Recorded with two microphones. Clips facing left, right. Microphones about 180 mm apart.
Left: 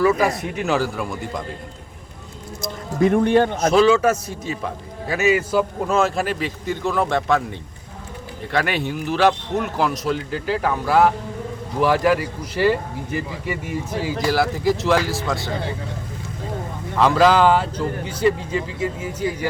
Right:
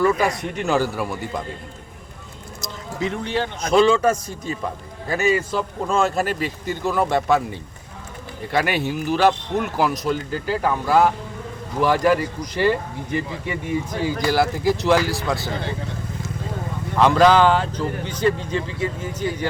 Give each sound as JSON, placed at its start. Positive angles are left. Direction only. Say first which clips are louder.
{"t": 0.2, "sound": "a man's voice", "louder": "left 1 dB", "side_deg": 5}
{"t": 2.6, "sound": "a sound", "louder": "left 7 dB", "side_deg": 55}
{"t": 3.7, "sound": "a man's voice", "louder": "right 1 dB", "side_deg": 5}
{"t": 8.5, "sound": "a man's voice", "louder": "right 1 dB", "side_deg": -5}
{"t": 17.0, "sound": "a man's voice", "louder": "right 1 dB", "side_deg": 0}